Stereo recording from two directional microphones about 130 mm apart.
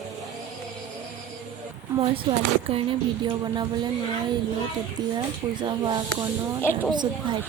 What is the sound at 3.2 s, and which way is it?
Speech, 35° right (ahead or behind).